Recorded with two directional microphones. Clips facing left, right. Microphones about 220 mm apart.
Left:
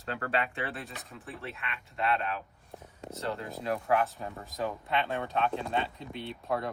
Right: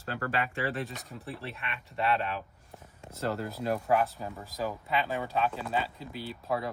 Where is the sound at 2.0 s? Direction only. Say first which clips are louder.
Right 1 dB; 35° right (ahead or behind).